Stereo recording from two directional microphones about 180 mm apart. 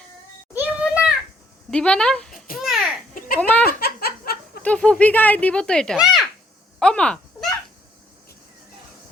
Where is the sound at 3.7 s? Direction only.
60° left (ahead or behind).